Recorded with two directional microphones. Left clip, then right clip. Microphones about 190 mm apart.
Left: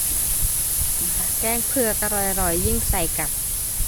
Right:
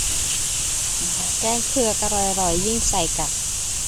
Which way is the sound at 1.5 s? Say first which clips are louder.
Right 1 dB; 5° right (ahead or behind).